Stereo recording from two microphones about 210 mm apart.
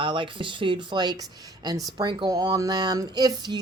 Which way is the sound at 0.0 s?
25° right (ahead or behind).